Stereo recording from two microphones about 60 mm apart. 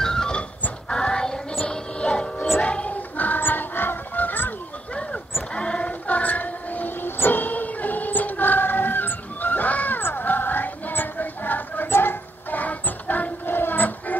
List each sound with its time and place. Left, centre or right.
0.0 s dog: centre
0.8 s child singing: centre
1.7 s music: centre
2.6 s honk: centre
4.9 s child singing: centre